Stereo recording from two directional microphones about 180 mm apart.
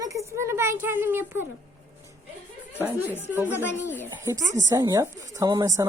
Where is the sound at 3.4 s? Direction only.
15° left (ahead or behind).